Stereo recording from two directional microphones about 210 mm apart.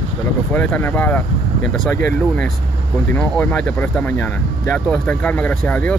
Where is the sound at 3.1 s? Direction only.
5° left (ahead or behind).